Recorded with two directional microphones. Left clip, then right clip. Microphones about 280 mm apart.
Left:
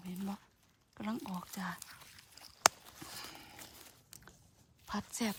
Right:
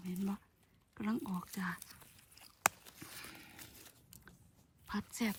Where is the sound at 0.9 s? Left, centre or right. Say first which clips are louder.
Right 1 dB; centre.